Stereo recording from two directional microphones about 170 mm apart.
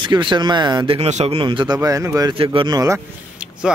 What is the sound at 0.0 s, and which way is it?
Speech, 30° right (ahead or behind).